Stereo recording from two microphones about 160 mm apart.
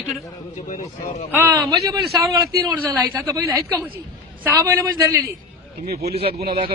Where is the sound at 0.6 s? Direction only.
50° left (ahead or behind).